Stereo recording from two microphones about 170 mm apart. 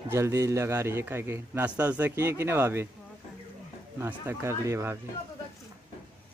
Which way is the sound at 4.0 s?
15° right (ahead or behind).